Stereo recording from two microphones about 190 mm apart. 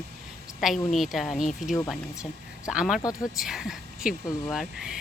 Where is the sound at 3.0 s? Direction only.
20° left (ahead or behind).